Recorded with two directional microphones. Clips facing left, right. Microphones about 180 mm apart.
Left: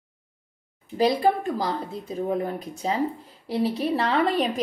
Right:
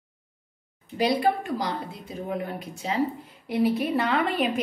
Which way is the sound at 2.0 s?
35° left (ahead or behind).